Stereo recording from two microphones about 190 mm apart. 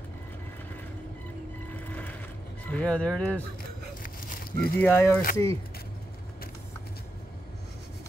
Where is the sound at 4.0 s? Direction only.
45° left (ahead or behind).